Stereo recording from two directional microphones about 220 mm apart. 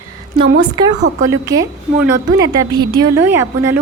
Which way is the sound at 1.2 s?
15° right (ahead or behind).